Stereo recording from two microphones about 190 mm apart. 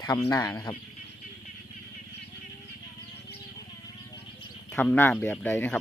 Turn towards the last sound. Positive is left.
turn(degrees=10)  # may be behind; listen again after turning